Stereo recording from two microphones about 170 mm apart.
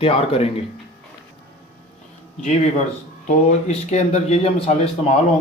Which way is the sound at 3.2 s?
40° left (ahead or behind).